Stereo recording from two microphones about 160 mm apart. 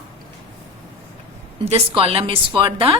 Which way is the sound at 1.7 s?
35° right (ahead or behind).